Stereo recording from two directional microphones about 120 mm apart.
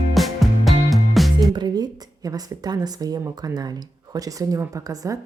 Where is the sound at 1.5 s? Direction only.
35° right (ahead or behind).